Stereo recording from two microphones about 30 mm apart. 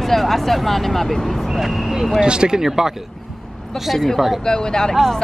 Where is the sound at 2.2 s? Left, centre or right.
Right.